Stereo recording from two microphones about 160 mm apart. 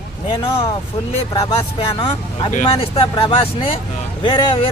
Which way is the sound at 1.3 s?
25° left (ahead or behind).